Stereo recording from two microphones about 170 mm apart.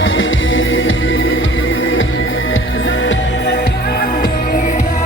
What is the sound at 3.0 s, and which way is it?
Music, 90° left.